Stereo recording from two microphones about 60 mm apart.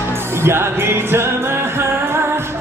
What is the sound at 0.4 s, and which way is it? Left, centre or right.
Music, right.